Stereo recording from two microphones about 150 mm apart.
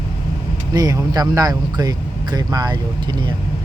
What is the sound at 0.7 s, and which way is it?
Speech, 25° right (ahead or behind).